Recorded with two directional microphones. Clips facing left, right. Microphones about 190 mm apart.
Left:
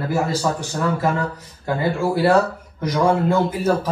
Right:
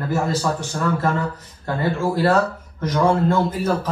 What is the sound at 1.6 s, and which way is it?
Speech, 10° left (ahead or behind).